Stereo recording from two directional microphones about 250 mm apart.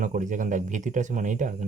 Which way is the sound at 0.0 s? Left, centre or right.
Right.